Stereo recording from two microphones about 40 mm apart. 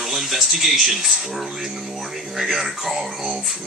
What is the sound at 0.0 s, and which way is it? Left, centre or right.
Speech, centre.